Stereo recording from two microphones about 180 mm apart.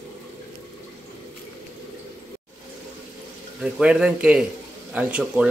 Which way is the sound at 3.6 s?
5° right (ahead or behind).